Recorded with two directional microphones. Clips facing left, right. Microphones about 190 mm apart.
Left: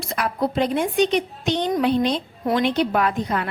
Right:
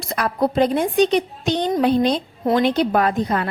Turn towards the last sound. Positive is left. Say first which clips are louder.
# right 3 dB
turn(degrees=-35)  # may be behind; listen again after turning